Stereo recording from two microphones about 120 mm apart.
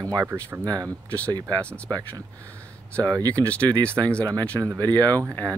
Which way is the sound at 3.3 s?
15° left (ahead or behind).